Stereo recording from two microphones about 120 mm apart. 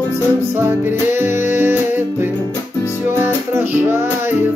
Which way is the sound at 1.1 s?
20° right (ahead or behind).